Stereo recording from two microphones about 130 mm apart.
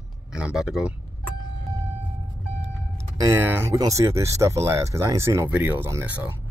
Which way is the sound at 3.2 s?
20° right (ahead or behind).